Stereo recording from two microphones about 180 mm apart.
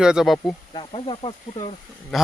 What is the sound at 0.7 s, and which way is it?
Speech, 30° left (ahead or behind).